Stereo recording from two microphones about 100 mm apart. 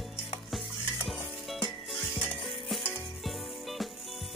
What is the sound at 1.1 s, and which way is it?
Music, centre (ahead or behind).